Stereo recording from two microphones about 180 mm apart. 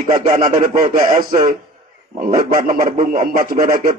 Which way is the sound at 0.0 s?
45° right (ahead or behind).